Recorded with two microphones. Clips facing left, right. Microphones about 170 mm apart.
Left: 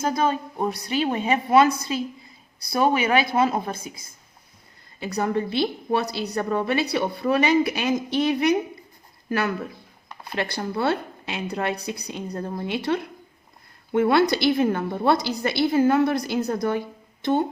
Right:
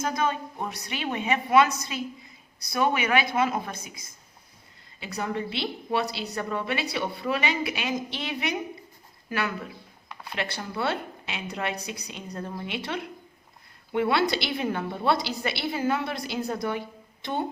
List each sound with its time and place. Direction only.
0.0 s a woman's voice: 30° left (ahead or behind)
4.9 s speech: 40° left (ahead or behind)
10.3 s a woman's voice: 40° left (ahead or behind)